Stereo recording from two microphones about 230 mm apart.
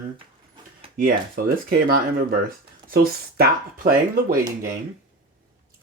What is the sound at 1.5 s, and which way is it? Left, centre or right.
Speech, right.